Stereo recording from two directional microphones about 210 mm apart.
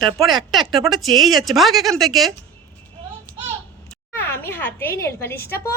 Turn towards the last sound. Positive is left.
turn(degrees=10)  # may be behind; listen again after turning